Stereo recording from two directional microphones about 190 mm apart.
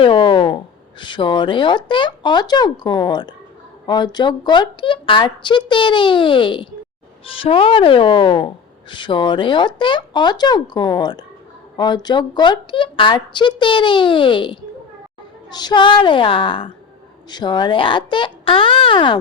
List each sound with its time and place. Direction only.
0.0 s a woman's voice: 25° left (ahead or behind)